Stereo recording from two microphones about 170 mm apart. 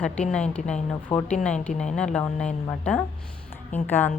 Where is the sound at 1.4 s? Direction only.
5° left (ahead or behind).